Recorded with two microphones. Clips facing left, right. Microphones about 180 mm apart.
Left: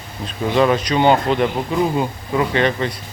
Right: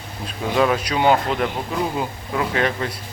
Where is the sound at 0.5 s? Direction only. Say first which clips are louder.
Left 3 dB; 5° right (ahead or behind).